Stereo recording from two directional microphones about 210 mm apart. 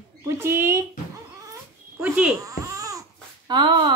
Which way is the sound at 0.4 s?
10° right (ahead or behind).